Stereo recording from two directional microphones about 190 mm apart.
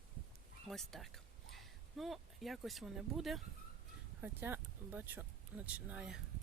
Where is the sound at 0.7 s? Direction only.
Centre (ahead or behind).